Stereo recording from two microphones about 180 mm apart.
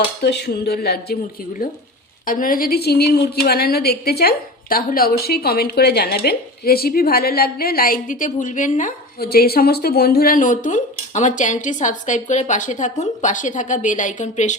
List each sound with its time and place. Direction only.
0.2 s a woman's voice: 70° left (ahead or behind)
2.2 s a woman's voice: 50° left (ahead or behind)